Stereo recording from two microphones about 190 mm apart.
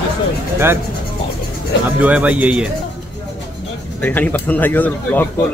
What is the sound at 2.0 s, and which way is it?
Speech, 10° right (ahead or behind).